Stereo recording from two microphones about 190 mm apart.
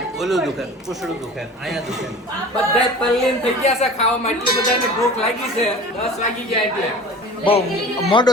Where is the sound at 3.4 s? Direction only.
35° left (ahead or behind).